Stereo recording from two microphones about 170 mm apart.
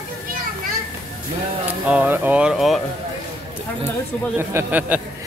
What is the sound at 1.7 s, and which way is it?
Speech, 10° right (ahead or behind).